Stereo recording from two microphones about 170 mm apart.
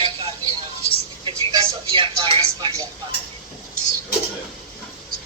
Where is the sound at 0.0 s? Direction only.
30° right (ahead or behind).